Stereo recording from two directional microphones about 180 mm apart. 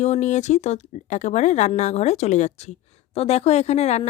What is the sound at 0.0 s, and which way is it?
Speech, 40° left (ahead or behind).